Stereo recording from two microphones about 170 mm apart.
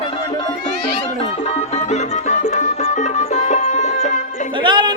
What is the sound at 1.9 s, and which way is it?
Music, 45° left (ahead or behind).